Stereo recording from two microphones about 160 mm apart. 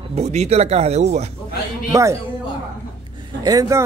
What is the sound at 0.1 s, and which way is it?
Speech, 45° right (ahead or behind).